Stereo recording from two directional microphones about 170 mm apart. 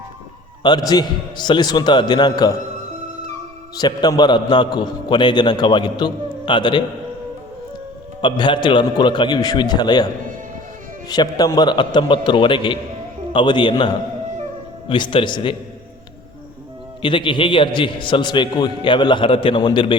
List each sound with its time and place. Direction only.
0.6 s a man's voice: 25° left (ahead or behind)
3.8 s a man's voice: 25° left (ahead or behind)
8.2 s a man's voice: 30° left (ahead or behind)
11.1 s a man's voice: 20° left (ahead or behind)
17.0 s a man's voice: 30° left (ahead or behind)